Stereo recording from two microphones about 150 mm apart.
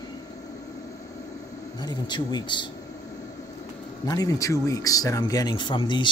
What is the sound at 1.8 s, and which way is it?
Speech, 30° left (ahead or behind).